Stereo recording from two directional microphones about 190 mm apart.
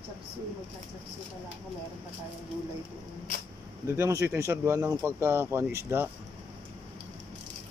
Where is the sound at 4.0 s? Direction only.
15° right (ahead or behind).